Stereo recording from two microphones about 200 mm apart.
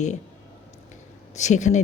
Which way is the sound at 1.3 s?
35° left (ahead or behind).